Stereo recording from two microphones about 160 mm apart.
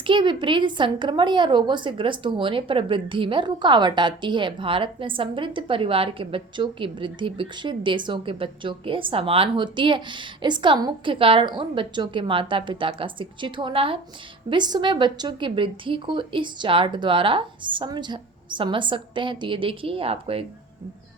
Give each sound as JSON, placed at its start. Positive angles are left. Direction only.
{"t": 0.1, "sound": "a woman's voice", "side_deg": -30}